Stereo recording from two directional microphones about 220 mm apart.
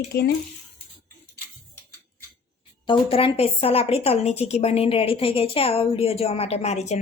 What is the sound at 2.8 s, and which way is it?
A woman's voice, 25° left (ahead or behind).